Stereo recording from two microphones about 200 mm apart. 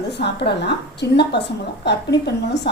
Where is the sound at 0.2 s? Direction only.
55° left (ahead or behind).